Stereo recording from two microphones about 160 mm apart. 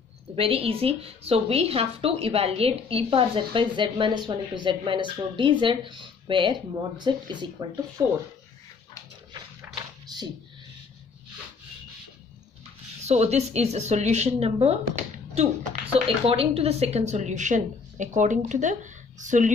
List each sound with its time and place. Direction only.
0.4 s a woman's voice: 35° right (ahead or behind)
10.1 s a sound: 25° right (ahead or behind)
13.0 s speech: 45° right (ahead or behind)